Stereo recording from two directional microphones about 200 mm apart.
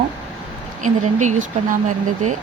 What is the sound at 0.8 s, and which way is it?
Speech, 40° right (ahead or behind).